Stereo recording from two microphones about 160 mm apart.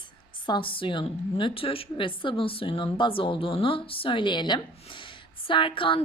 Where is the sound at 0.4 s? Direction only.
30° left (ahead or behind).